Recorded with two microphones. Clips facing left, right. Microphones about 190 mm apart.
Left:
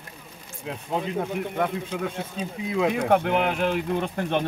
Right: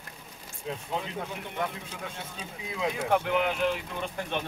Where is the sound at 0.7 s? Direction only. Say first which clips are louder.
Left 5 dB; 60° left (ahead or behind).